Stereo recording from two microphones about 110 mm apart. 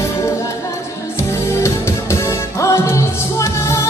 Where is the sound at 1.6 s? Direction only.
25° left (ahead or behind).